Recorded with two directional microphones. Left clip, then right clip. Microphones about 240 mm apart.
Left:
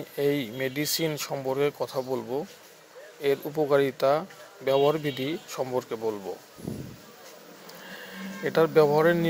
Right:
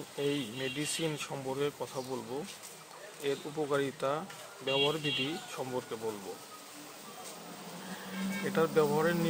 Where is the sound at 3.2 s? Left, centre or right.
Left.